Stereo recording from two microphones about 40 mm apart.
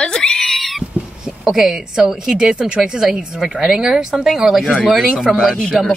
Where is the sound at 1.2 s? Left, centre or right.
Centre.